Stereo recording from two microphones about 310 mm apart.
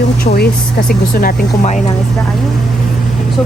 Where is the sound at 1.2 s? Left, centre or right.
Left.